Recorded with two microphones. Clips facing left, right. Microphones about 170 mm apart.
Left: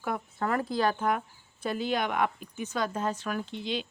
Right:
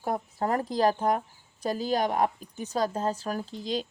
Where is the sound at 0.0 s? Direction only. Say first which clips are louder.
Right 2 dB; 35° right (ahead or behind).